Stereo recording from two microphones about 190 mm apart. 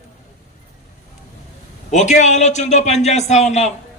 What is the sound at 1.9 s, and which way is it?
A man's voice, 40° left (ahead or behind).